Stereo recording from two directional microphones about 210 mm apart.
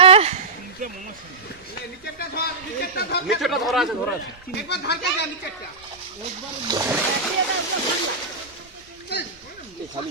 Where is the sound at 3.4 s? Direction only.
Centre (ahead or behind).